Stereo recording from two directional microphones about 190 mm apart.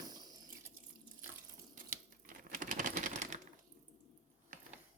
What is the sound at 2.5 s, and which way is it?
Typewriter, 45° right (ahead or behind).